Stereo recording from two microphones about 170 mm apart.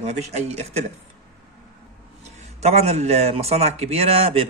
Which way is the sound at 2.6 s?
40° right (ahead or behind).